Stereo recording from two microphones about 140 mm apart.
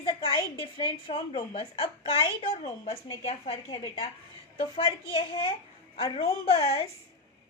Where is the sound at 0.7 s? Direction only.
40° left (ahead or behind).